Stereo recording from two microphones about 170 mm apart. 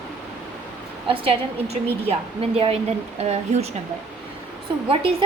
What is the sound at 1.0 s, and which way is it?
Speech, 30° right (ahead or behind).